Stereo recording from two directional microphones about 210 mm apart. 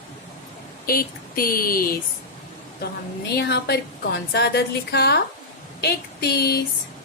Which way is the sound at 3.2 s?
50° left (ahead or behind).